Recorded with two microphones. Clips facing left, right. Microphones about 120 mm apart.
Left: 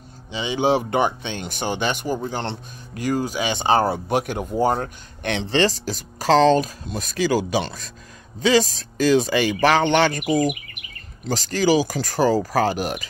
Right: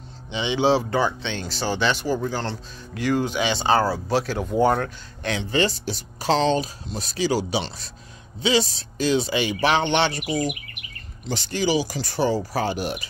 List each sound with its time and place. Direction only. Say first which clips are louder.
0.3 s speech: even; 40° left (ahead or behind)
0.8 s speech: left 2 dB; 20° left (ahead or behind)
1.8 s speech: right 2 dB; 50° left (ahead or behind)
2.1 s speech: even; 20° left (ahead or behind)
2.9 s speech: even; 40° left (ahead or behind)
3.5 s speech: left 3 dB; 20° left (ahead or behind)
4.6 s speech: right 1 dB; 30° left (ahead or behind); by 13.0 s 45° left (ahead or behind)